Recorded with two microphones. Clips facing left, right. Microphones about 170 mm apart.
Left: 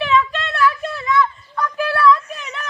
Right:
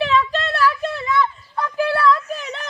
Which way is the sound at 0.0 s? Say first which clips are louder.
Even; 35° right (ahead or behind).